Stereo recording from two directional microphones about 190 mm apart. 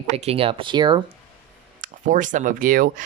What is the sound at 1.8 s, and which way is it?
Speech, 45° right (ahead or behind).